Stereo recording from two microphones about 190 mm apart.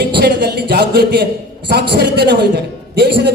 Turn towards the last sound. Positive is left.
turn(degrees=-60)  # may be behind; listen again after turning